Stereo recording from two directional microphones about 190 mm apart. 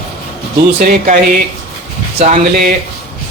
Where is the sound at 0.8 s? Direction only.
55° right (ahead or behind).